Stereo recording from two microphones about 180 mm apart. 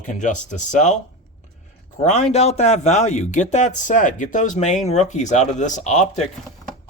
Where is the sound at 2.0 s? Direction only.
35° left (ahead or behind).